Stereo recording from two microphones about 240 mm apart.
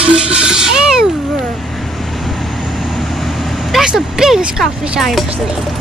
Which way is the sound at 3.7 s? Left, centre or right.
Centre.